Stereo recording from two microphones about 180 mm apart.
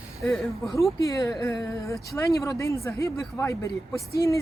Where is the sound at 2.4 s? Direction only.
15° left (ahead or behind).